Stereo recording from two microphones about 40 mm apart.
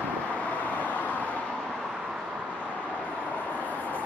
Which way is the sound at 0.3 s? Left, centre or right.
Left.